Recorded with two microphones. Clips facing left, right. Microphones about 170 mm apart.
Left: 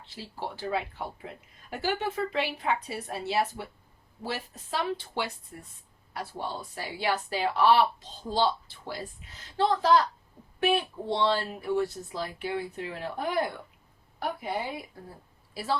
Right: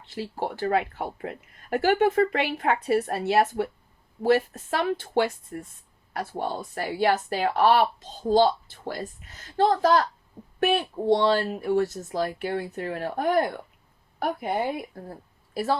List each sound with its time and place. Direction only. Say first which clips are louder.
0.1 s a woman's voice: right 8 dB; 55° right (ahead or behind)